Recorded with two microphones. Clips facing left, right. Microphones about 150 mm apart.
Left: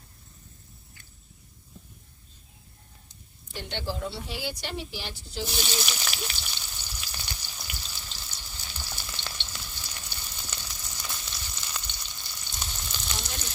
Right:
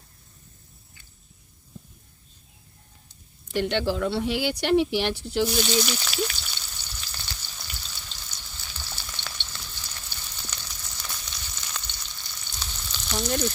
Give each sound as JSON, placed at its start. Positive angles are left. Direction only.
{"t": 3.5, "sound": "speech", "side_deg": -75}
{"t": 5.8, "sound": "frying", "side_deg": 5}